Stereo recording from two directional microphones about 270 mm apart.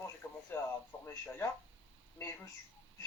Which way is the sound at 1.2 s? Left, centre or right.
Centre.